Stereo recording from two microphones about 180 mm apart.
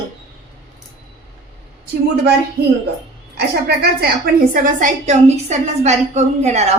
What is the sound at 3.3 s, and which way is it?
A woman's voice, 60° right (ahead or behind).